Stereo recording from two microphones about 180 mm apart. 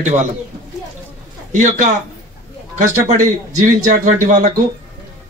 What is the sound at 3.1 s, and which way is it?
A man's voice, 45° right (ahead or behind).